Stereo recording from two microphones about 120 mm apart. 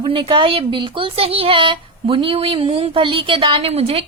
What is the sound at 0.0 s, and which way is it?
Speech, 50° right (ahead or behind).